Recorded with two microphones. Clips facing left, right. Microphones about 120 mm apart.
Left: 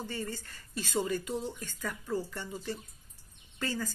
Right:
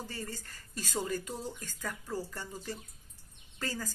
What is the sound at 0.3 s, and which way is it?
Speech, 40° right (ahead or behind).